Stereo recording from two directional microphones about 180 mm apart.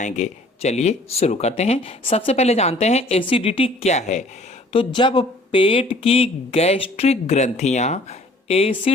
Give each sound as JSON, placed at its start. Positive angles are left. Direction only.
{"t": 0.0, "sound": "speech", "side_deg": 40}
{"t": 4.7, "sound": "speech", "side_deg": 30}